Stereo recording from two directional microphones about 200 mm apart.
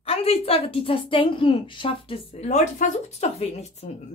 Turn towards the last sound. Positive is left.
turn(degrees=35)  # may be behind; listen again after turning